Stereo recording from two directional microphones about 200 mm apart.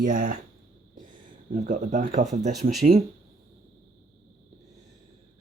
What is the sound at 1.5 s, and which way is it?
Speech, 40° right (ahead or behind).